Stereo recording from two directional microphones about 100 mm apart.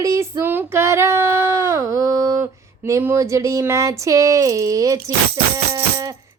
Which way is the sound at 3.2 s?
30° right (ahead or behind).